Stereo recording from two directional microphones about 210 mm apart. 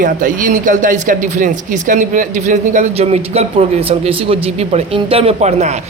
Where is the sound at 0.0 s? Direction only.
40° right (ahead or behind).